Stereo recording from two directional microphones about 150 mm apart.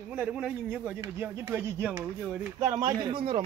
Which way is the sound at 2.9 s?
30° right (ahead or behind).